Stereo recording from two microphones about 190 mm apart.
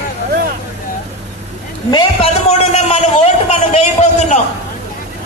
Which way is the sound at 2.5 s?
35° left (ahead or behind).